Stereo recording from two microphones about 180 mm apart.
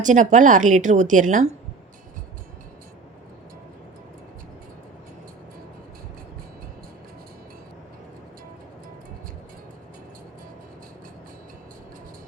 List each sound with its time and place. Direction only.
0.0 s a woman's voice: 45° right (ahead or behind)